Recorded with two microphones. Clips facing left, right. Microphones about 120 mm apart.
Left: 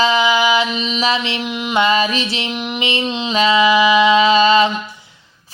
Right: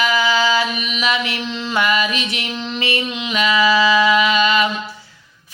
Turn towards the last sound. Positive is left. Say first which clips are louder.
# left 5 dB
turn(degrees=30)  # may be behind; listen again after turning